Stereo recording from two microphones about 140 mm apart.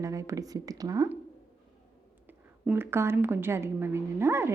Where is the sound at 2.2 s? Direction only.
15° right (ahead or behind).